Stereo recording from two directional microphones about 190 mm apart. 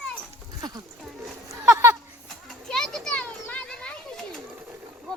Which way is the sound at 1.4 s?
15° right (ahead or behind).